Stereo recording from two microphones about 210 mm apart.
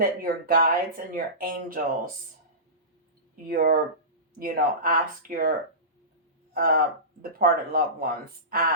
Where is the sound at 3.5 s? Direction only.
45° right (ahead or behind).